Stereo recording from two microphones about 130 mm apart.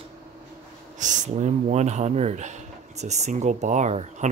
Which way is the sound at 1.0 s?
70° right (ahead or behind).